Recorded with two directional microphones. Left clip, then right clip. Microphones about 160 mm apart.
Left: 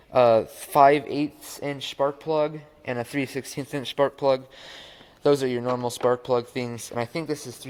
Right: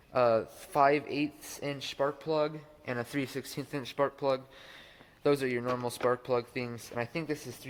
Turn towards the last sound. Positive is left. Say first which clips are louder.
# left 6 dB
turn(degrees=40)  # may be behind; listen again after turning